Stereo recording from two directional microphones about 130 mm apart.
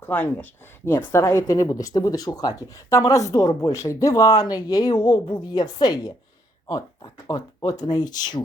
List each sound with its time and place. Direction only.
0.0 s speech: 15° left (ahead or behind); by 8.4 s 30° left (ahead or behind)